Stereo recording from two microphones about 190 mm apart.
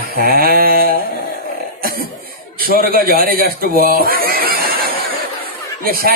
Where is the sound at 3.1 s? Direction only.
50° right (ahead or behind).